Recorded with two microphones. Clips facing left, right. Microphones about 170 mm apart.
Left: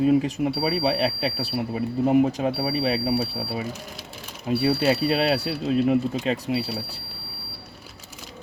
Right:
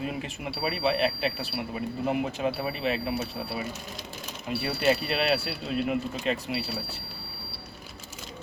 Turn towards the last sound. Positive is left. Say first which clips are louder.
# left 6 dB
turn(degrees=30)  # may be behind; listen again after turning